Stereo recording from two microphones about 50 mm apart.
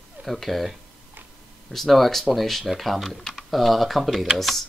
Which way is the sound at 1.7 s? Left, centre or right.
Centre.